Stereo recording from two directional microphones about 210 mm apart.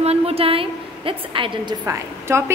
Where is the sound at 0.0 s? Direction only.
30° right (ahead or behind).